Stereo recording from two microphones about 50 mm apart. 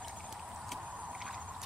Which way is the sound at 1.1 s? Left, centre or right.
Right.